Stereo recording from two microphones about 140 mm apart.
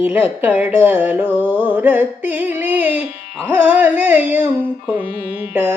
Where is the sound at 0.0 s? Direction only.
10° right (ahead or behind).